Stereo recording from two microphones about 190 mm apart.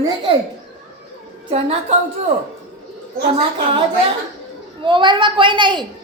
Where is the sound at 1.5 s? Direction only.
35° right (ahead or behind).